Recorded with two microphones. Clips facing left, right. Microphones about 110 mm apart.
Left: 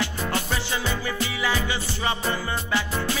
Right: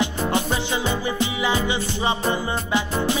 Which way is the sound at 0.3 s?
20° right (ahead or behind).